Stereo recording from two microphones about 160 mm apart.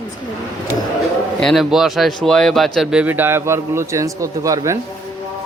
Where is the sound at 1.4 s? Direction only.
Centre (ahead or behind); by 4.7 s 20° right (ahead or behind).